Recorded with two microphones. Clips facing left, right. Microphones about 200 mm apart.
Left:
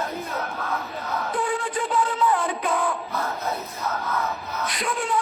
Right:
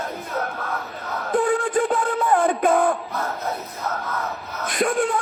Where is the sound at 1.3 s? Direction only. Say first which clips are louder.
Right 9 dB; 50° right (ahead or behind).